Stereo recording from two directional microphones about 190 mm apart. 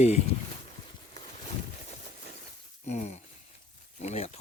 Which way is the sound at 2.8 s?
35° left (ahead or behind).